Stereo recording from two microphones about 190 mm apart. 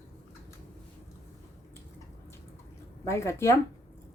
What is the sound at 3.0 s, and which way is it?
Speech, 15° left (ahead or behind).